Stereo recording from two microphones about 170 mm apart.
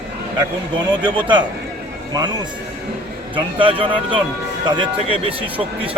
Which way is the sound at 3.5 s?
30° right (ahead or behind).